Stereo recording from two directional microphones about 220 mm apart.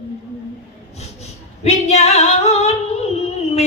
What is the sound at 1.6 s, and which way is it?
Singing, 30° left (ahead or behind).